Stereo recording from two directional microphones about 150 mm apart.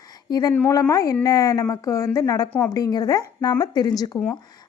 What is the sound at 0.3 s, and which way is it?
A woman's voice, 25° left (ahead or behind).